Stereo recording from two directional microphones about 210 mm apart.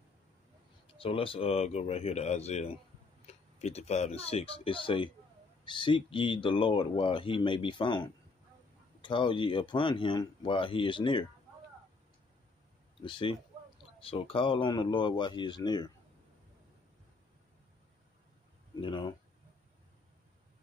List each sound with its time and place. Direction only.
0.9 s speech: 25° left (ahead or behind)
13.0 s speech: 25° left (ahead or behind)
18.8 s speech: 20° left (ahead or behind)